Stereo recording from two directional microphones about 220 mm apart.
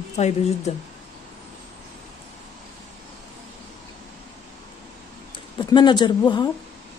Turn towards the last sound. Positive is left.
turn(degrees=20)  # may be behind; listen again after turning